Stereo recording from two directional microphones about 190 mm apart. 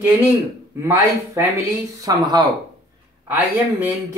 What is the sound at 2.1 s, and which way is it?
Speech, 20° right (ahead or behind).